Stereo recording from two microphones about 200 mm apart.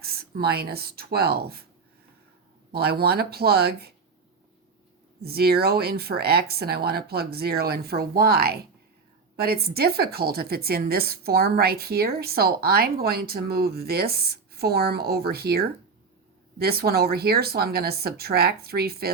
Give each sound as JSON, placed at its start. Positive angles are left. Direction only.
{"t": 0.0, "sound": "a woman's voice", "side_deg": -50}
{"t": 2.7, "sound": "a woman's voice", "side_deg": -50}
{"t": 5.2, "sound": "a woman's voice", "side_deg": -50}